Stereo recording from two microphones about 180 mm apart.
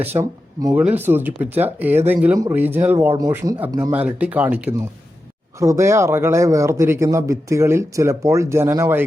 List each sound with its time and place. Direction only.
0.0 s speech: 15° right (ahead or behind)
3.9 s speech: 10° right (ahead or behind)